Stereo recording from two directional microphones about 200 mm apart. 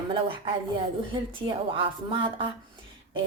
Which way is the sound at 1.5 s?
25° right (ahead or behind).